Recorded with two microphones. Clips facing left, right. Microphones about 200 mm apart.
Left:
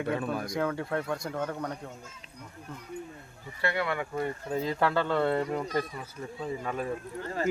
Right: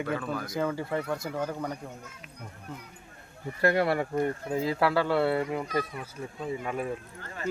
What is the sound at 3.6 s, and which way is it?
Speech, 40° right (ahead or behind).